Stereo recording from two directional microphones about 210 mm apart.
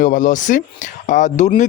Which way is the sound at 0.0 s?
40° left (ahead or behind).